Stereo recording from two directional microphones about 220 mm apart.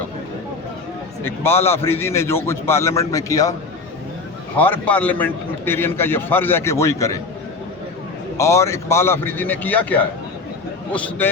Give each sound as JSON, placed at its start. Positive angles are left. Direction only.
{"t": 1.2, "sound": "a man's voice", "side_deg": 10}
{"t": 4.5, "sound": "a man's voice", "side_deg": 5}
{"t": 8.4, "sound": "a man's voice", "side_deg": 15}